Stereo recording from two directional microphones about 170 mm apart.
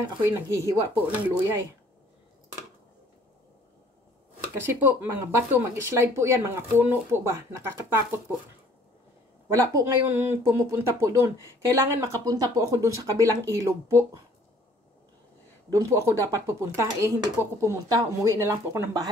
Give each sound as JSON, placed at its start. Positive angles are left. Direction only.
{"t": 0.2, "sound": "speech", "side_deg": -15}
{"t": 4.8, "sound": "speech", "side_deg": -10}
{"t": 9.5, "sound": "speech", "side_deg": -15}
{"t": 15.7, "sound": "speech", "side_deg": -15}